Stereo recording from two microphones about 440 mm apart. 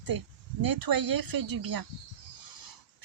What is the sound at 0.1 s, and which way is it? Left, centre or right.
Speech, right.